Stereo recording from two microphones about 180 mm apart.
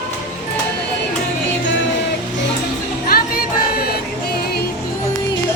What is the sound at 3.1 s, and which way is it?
Music, 55° left (ahead or behind).